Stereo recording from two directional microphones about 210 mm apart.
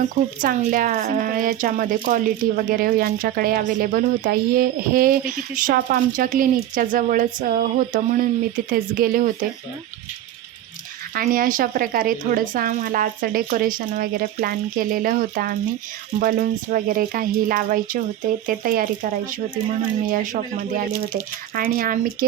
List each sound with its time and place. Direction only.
0.4 s speech: 40° right (ahead or behind)
11.1 s speech: 45° right (ahead or behind)